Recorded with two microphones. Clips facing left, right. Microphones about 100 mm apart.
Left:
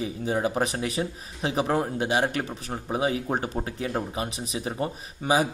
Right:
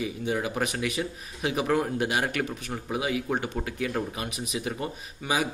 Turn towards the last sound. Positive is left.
turn(degrees=35)  # may be behind; listen again after turning